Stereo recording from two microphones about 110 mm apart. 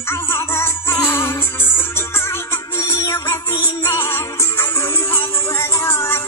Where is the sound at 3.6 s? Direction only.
25° left (ahead or behind).